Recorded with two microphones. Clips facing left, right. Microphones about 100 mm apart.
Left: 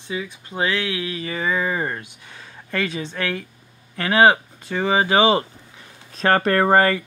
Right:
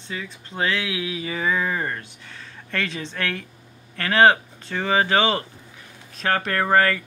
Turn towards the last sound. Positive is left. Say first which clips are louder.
# left 3 dB
turn(degrees=30)  # may be behind; listen again after turning